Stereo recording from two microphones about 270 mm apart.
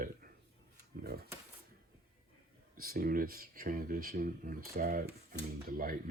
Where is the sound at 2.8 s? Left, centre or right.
Right.